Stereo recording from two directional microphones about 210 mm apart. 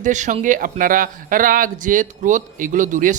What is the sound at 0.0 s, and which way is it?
Speech, 35° right (ahead or behind).